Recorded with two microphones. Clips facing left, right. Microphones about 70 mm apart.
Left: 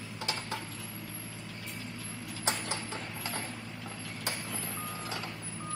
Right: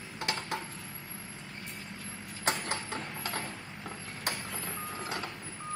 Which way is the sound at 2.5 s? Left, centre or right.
Right.